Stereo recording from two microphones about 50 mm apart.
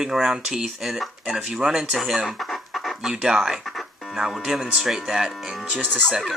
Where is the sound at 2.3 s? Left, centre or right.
Centre.